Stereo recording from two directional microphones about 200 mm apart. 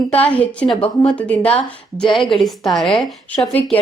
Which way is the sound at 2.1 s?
25° left (ahead or behind).